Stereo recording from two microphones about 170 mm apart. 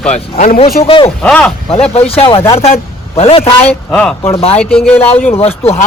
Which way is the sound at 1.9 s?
35° left (ahead or behind).